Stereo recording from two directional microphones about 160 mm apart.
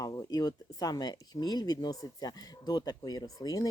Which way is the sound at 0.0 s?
25° left (ahead or behind).